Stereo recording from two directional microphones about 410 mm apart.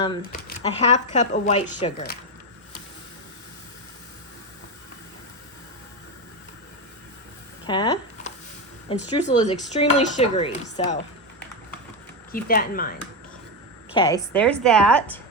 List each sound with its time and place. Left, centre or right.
0.4 s dishes: centre
7.7 s speech: centre
8.9 s dishes: centre
12.3 s speech: left
13.9 s a woman's voice: centre